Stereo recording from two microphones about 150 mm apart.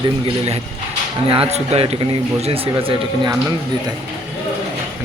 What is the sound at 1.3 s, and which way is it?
A man's voice, 40° right (ahead or behind).